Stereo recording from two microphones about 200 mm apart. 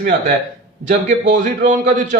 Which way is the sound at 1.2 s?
40° right (ahead or behind).